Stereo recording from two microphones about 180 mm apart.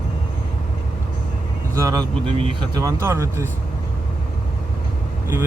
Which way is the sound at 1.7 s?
20° right (ahead or behind).